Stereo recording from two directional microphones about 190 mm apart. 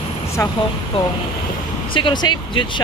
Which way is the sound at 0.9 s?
30° left (ahead or behind).